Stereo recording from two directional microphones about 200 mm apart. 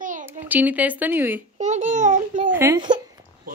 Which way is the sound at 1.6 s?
40° right (ahead or behind).